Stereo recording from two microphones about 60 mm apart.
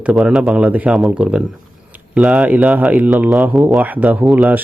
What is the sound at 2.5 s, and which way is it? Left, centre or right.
Speech, right.